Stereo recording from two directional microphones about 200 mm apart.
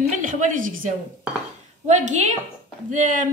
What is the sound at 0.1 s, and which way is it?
A woman's voice, 40° right (ahead or behind).